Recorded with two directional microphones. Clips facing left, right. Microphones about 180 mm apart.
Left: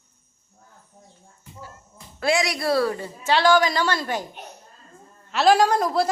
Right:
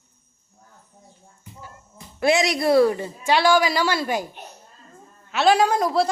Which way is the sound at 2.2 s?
25° right (ahead or behind).